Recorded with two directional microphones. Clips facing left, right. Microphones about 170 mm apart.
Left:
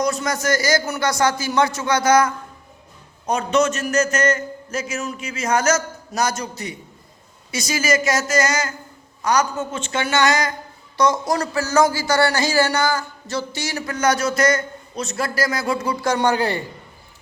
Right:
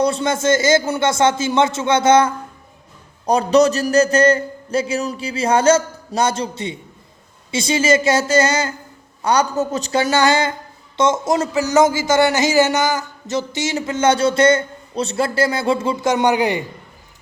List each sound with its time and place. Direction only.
0.0 s a man's voice: 30° right (ahead or behind)